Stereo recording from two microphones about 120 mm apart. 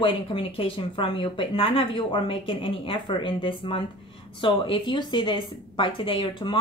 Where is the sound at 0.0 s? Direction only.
45° left (ahead or behind).